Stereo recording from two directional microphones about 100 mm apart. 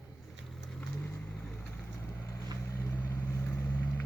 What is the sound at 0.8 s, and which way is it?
Vehicle, 10° left (ahead or behind).